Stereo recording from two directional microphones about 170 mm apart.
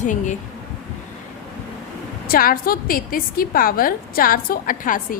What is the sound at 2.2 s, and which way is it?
A woman's voice, 60° left (ahead or behind).